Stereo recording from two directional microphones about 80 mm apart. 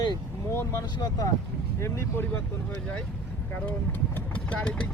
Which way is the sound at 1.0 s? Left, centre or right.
Left.